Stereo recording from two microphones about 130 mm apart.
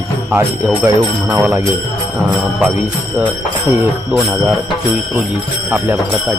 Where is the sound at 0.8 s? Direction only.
15° right (ahead or behind).